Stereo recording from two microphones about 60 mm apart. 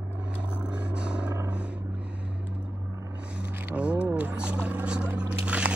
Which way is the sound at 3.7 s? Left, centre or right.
Centre.